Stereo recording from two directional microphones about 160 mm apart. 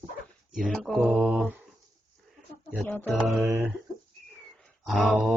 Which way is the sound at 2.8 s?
10° left (ahead or behind).